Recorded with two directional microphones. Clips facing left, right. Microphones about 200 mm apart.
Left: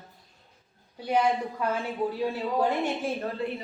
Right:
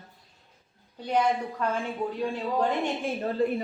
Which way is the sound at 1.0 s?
10° left (ahead or behind).